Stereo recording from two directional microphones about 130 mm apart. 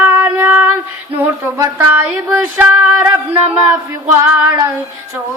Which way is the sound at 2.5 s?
10° right (ahead or behind).